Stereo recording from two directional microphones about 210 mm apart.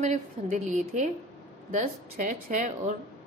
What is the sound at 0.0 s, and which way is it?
A woman's voice, 35° right (ahead or behind).